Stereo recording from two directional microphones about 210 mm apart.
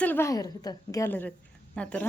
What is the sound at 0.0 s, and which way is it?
A woman's voice, 10° left (ahead or behind).